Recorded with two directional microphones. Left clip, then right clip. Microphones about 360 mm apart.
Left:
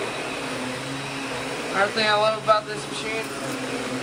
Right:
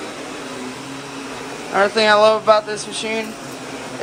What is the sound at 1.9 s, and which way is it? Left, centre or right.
Speech, right.